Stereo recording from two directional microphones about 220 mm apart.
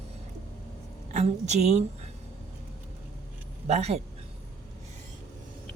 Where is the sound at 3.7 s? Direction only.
30° right (ahead or behind).